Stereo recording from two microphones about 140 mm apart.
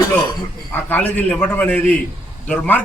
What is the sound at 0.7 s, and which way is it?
A man's voice, 15° left (ahead or behind).